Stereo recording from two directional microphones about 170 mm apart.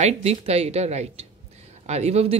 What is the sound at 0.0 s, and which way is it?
Speech, 40° right (ahead or behind).